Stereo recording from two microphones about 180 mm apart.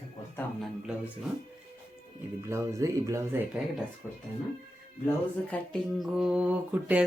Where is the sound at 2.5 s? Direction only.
15° right (ahead or behind).